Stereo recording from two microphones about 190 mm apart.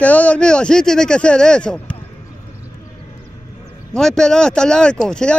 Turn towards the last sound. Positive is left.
turn(degrees=5)  # may be behind; listen again after turning